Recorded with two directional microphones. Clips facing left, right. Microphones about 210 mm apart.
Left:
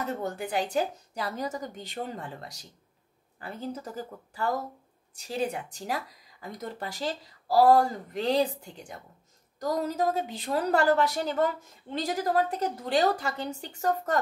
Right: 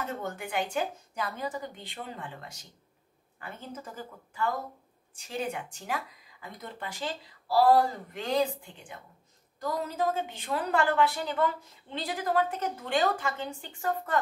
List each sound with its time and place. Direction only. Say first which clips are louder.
0.0 s speech: left 3 dB; 35° left (ahead or behind)